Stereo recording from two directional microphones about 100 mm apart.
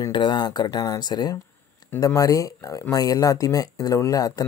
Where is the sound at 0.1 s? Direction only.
50° left (ahead or behind).